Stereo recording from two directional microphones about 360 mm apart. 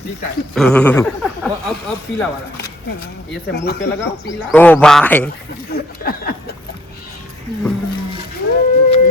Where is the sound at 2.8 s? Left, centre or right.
Left.